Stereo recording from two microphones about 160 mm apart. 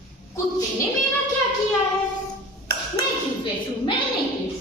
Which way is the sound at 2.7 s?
75° right (ahead or behind).